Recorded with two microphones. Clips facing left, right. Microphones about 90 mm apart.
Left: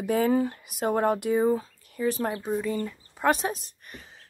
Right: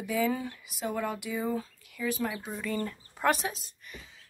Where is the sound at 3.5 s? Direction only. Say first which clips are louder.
Left 7 dB; 50° left (ahead or behind).